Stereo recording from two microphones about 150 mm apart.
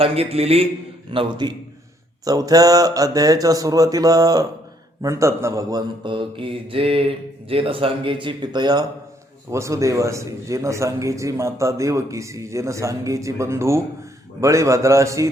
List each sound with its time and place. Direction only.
0.0 s a man's voice: 40° right (ahead or behind); by 5.8 s 20° right (ahead or behind)
6.0 s a man's voice: 30° right (ahead or behind)